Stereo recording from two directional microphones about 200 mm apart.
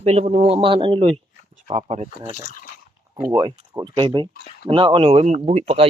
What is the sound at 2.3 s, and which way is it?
Speech, 40° left (ahead or behind).